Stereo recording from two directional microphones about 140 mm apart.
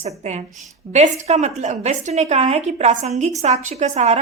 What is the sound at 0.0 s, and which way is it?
A woman's voice, 55° right (ahead or behind).